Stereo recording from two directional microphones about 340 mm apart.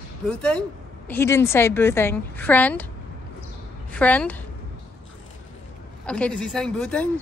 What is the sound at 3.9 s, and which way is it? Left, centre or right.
Speech, centre.